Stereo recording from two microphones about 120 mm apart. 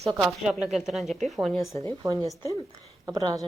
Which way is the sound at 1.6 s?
25° left (ahead or behind).